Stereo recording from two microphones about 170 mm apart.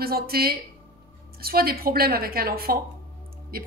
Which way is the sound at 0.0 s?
65° right (ahead or behind).